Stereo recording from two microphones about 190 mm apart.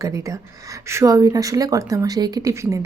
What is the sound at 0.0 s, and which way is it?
A woman's voice, 15° right (ahead or behind).